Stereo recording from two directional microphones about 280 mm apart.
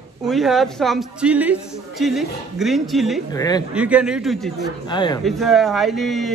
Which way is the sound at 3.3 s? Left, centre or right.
Centre.